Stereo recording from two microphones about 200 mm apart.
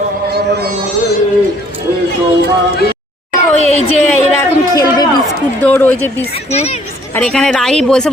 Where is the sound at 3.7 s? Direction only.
35° left (ahead or behind).